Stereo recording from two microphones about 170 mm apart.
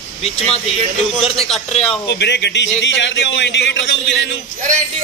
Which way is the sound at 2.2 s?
90° left.